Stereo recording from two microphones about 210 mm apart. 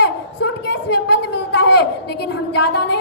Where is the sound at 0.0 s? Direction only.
55° left (ahead or behind).